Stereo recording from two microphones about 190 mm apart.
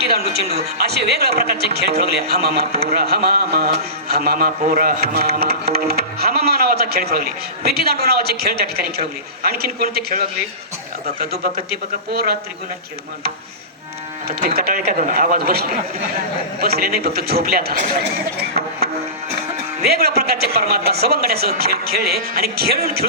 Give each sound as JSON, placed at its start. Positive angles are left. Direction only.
{"t": 0.8, "sound": "speech", "side_deg": -55}
{"t": 14.3, "sound": "speech", "side_deg": -55}
{"t": 19.9, "sound": "speech", "side_deg": -55}